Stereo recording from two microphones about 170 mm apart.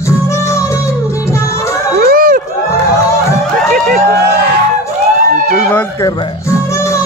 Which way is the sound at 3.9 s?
75° right (ahead or behind).